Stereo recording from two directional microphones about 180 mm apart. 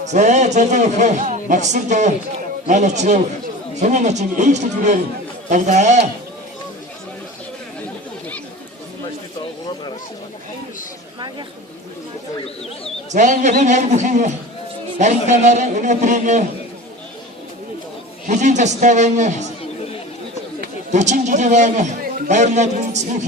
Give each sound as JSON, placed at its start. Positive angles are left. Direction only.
{"t": 0.0, "sound": "a man's voice", "side_deg": -40}
{"t": 13.1, "sound": "a man's voice", "side_deg": -45}
{"t": 18.3, "sound": "a man's voice", "side_deg": -40}
{"t": 20.9, "sound": "a man's voice", "side_deg": -40}